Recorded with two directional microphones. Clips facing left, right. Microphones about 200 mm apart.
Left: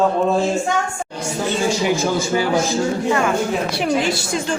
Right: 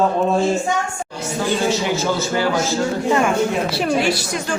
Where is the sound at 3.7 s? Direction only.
20° left (ahead or behind).